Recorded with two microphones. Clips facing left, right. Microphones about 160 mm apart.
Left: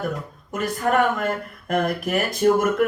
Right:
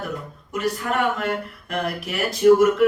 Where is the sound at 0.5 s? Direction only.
50° left (ahead or behind).